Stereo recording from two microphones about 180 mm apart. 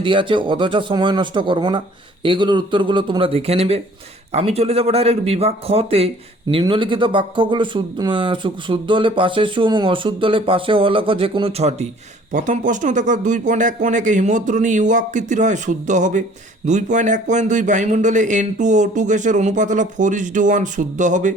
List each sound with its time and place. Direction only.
0.0 s a man's voice: 25° right (ahead or behind); by 21.3 s 45° right (ahead or behind)